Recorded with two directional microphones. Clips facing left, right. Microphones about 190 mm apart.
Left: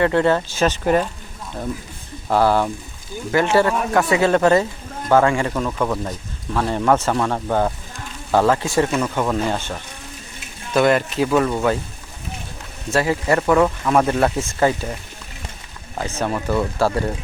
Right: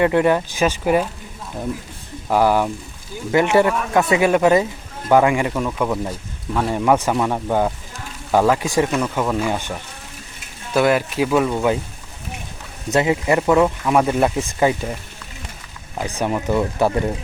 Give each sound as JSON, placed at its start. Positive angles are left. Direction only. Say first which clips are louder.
{"t": 0.0, "sound": "speech", "louder": "right 1 dB", "side_deg": -15}
{"t": 2.3, "sound": "speech", "louder": "even", "side_deg": -10}
{"t": 5.5, "sound": "speech", "louder": "right 1 dB", "side_deg": -5}
{"t": 8.9, "sound": "speech", "louder": "even", "side_deg": 0}
{"t": 9.5, "sound": "speech", "louder": "even", "side_deg": -15}
{"t": 10.8, "sound": "speech", "louder": "even", "side_deg": -5}
{"t": 12.9, "sound": "speech", "louder": "right 1 dB", "side_deg": -20}
{"t": 16.0, "sound": "speech", "louder": "right 1 dB", "side_deg": -15}